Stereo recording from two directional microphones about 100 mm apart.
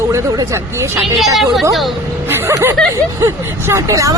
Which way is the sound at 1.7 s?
Centre (ahead or behind).